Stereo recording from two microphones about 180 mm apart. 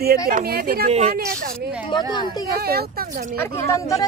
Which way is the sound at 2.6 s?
60° right (ahead or behind).